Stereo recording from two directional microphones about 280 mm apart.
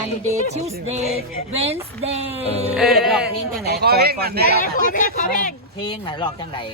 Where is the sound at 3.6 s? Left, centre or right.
Right.